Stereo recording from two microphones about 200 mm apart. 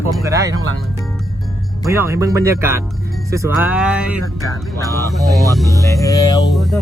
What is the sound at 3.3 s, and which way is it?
Music, 10° right (ahead or behind).